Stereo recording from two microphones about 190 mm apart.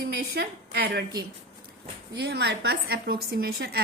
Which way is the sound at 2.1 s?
60° right (ahead or behind).